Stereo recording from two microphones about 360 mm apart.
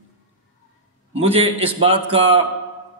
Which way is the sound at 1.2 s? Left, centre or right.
Centre.